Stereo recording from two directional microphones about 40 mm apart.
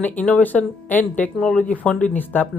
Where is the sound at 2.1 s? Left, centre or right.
Left.